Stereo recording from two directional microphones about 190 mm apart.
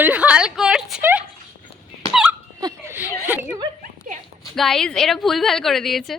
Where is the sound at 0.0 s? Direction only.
10° right (ahead or behind).